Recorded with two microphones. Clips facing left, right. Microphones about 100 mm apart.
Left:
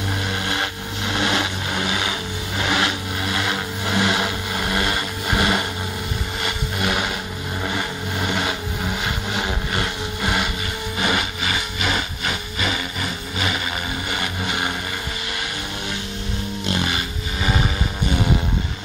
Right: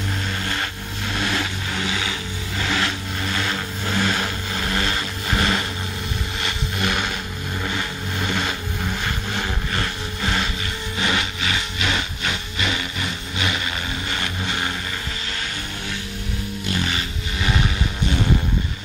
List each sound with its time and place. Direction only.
0.5 s vehicle: 20° left (ahead or behind)
11.0 s music: 10° left (ahead or behind)
11.8 s vehicle: 5° left (ahead or behind)
16.7 s music: 15° left (ahead or behind)
17.4 s vehicle: 10° left (ahead or behind)